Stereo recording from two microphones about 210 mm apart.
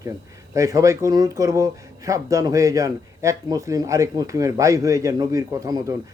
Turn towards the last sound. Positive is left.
turn(degrees=-15)  # may be behind; listen again after turning